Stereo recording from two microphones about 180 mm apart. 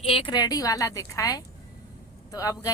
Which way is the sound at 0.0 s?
30° left (ahead or behind).